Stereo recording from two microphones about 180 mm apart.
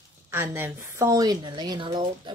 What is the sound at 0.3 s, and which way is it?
A woman's voice, 10° right (ahead or behind).